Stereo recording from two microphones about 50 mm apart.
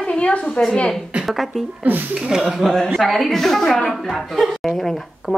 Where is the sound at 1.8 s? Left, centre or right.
Right.